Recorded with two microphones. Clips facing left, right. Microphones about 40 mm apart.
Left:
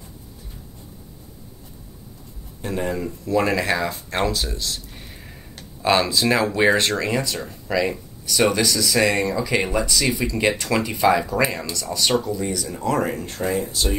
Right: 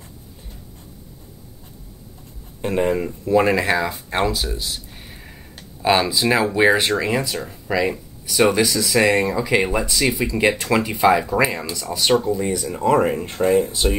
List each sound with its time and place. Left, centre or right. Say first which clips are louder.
2.6 s speech: right 5 dB; right; by 12.3 s centre
12.3 s speech: right 4 dB; right
13.4 s speech: right 7 dB; right